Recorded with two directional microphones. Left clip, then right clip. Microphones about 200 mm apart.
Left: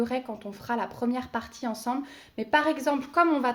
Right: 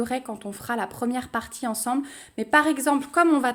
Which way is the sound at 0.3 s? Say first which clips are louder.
Right 2 dB; 35° right (ahead or behind).